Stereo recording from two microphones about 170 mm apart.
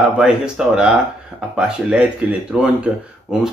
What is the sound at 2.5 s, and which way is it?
Speech, 5° right (ahead or behind).